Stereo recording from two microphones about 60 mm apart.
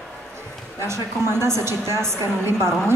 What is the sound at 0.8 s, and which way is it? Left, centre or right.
A woman's voice, right.